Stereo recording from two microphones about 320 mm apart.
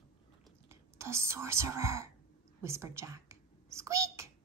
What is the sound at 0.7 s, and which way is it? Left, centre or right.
A child's voice, centre.